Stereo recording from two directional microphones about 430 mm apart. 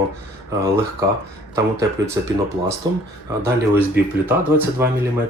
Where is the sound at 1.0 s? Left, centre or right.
Centre.